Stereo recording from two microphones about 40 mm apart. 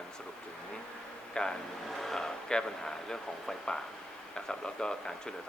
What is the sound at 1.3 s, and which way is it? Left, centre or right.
Speech, centre.